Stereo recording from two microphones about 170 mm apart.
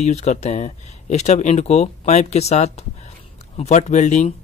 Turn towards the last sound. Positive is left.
turn(degrees=45)  # may be behind; listen again after turning